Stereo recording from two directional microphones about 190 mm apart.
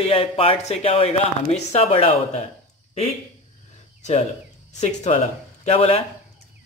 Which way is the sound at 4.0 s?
35° left (ahead or behind).